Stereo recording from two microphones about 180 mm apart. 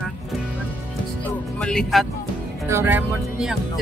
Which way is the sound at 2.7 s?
10° right (ahead or behind).